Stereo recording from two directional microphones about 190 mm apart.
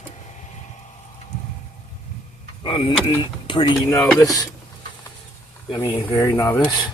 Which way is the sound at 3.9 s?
10° left (ahead or behind).